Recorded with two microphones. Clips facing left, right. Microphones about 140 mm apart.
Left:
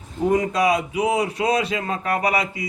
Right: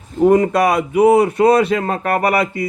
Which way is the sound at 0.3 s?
50° right (ahead or behind).